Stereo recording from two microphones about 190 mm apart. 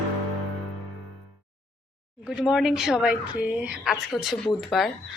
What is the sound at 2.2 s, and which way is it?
A woman's voice, 5° right (ahead or behind).